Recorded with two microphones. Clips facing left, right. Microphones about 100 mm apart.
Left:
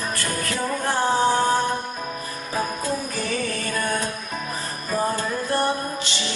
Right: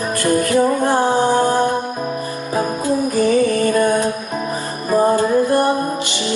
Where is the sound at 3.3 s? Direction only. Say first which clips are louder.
Right 12 dB; 15° right (ahead or behind).